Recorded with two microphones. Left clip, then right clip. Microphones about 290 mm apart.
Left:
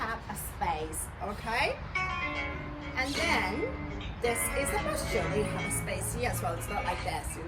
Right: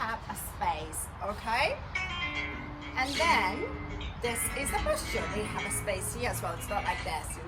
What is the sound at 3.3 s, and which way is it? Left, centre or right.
Speech, centre.